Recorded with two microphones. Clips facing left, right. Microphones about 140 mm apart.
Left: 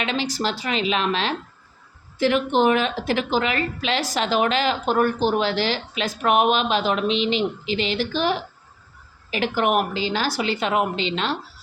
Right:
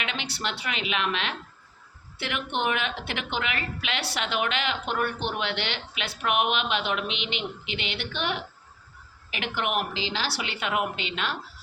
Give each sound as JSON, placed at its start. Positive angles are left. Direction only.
{"t": 0.0, "sound": "a woman's voice", "side_deg": 35}
{"t": 10.4, "sound": "speech", "side_deg": 35}